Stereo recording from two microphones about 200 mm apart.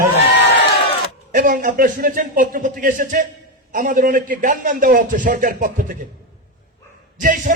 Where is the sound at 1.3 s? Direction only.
45° right (ahead or behind).